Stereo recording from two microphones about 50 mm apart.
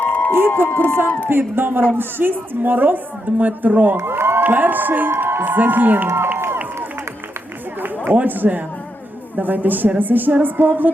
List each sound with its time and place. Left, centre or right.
0.0 s a sound: left
0.7 s speech: left
1.3 s a man's voice: right
4.0 s a sound: right
4.4 s a woman's voice: right
8.1 s a woman's voice: right